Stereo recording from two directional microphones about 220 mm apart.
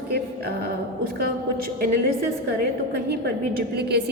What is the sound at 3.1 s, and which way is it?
Speech, 45° right (ahead or behind).